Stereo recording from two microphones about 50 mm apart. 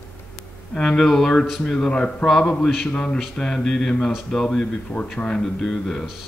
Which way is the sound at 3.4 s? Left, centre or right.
Centre.